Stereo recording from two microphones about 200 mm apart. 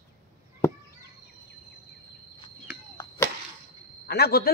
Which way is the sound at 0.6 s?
15° left (ahead or behind).